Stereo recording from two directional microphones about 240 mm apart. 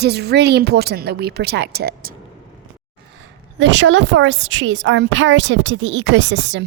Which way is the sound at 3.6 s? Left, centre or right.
Right.